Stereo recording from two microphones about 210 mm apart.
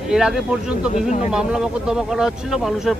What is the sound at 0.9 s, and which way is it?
Speech, 35° left (ahead or behind).